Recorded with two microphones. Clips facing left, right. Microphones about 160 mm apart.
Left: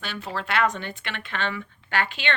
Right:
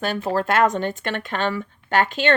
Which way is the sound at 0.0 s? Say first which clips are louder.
Right 10 dB; 45° right (ahead or behind).